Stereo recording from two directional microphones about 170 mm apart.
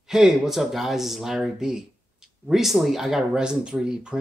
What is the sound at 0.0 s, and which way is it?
Speech, 5° right (ahead or behind).